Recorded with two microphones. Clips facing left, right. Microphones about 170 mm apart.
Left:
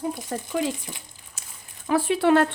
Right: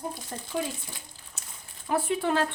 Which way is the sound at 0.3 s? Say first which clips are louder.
Left 8 dB; 90° left.